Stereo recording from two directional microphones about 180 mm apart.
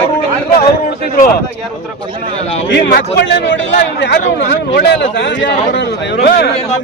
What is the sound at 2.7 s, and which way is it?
Speech, 65° left (ahead or behind).